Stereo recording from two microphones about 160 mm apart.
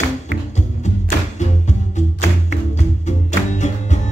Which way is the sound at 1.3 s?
45° left (ahead or behind).